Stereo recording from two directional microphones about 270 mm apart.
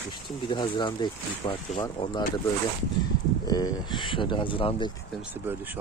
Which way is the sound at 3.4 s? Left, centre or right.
Centre.